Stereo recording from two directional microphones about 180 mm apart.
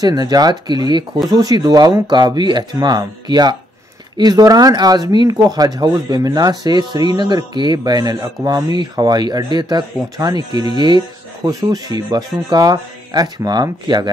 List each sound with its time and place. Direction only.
0.0 s speech: 20° right (ahead or behind)